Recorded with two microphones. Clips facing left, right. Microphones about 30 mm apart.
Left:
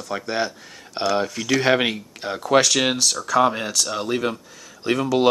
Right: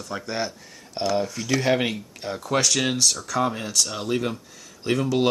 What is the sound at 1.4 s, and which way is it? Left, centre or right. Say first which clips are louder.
Speech: left 5 dB; left.